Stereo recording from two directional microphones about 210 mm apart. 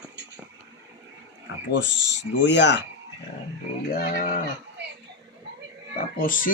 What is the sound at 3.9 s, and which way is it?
Speech, 45° left (ahead or behind).